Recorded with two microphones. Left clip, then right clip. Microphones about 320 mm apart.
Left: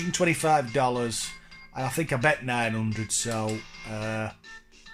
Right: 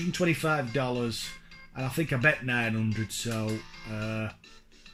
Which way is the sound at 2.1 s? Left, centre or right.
Centre.